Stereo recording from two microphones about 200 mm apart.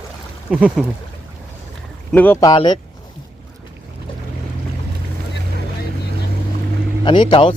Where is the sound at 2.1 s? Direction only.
10° left (ahead or behind).